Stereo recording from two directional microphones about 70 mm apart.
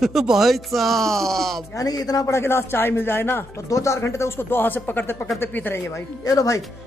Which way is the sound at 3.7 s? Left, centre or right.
Left.